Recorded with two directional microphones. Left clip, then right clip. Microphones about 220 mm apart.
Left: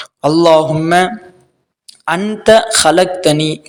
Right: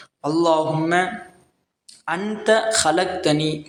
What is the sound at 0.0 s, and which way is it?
Speech, 40° left (ahead or behind).